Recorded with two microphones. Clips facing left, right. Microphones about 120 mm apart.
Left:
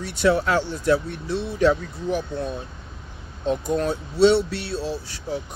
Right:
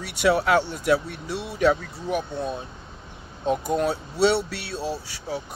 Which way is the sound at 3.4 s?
10° right (ahead or behind).